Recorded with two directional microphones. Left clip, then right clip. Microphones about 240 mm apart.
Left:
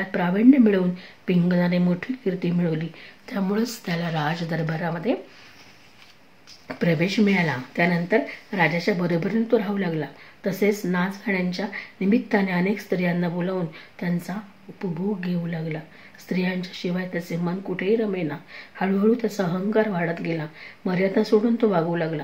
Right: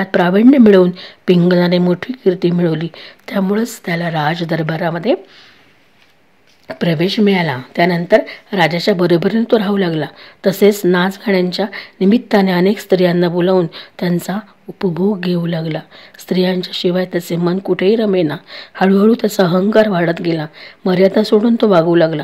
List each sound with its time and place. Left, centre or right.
0.0 s speech: right
6.7 s speech: right